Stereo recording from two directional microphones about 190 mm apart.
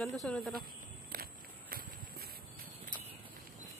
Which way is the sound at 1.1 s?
50° right (ahead or behind).